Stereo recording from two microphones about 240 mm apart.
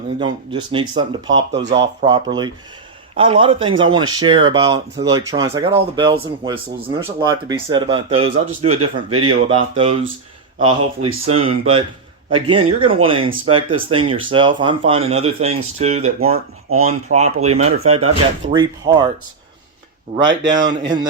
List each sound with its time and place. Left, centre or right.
0.2 s a man's voice: right
20.2 s a man's voice: centre